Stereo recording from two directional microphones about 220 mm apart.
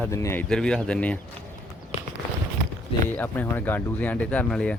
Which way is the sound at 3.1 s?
5° left (ahead or behind).